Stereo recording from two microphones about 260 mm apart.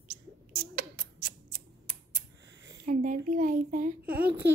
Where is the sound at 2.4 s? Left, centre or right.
Right.